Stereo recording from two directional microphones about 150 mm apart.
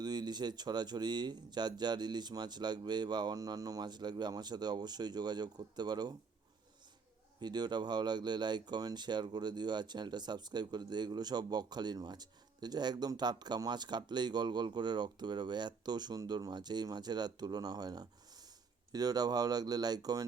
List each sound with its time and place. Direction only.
0.0 s speech: 30° right (ahead or behind)
7.4 s speech: 30° right (ahead or behind)